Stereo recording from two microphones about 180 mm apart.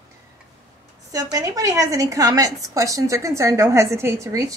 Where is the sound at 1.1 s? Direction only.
20° right (ahead or behind).